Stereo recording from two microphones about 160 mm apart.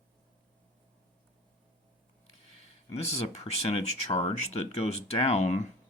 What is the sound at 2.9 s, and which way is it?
Speech, 40° left (ahead or behind).